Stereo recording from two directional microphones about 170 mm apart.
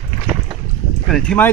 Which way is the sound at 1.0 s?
5° left (ahead or behind).